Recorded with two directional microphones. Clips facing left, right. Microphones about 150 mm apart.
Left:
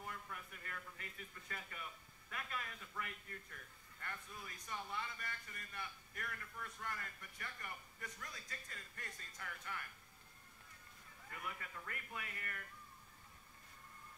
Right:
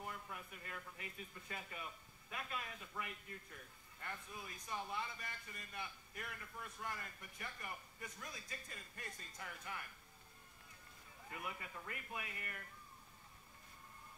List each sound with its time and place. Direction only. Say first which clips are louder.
0.0 s a man's voice: right 1 dB; 15° right (ahead or behind)
11.2 s a man's voice: right 1 dB; 15° right (ahead or behind)